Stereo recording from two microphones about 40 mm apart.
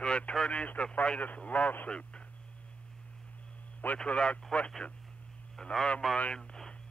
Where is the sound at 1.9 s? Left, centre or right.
Left.